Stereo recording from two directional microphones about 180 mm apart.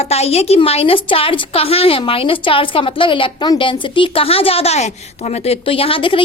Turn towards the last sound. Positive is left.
turn(degrees=30)  # may be behind; listen again after turning